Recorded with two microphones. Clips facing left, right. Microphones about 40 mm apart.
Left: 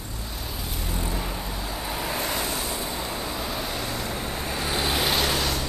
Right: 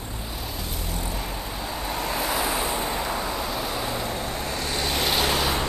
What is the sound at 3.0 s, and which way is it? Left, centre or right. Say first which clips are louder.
Vehicle: right 3 dB; centre.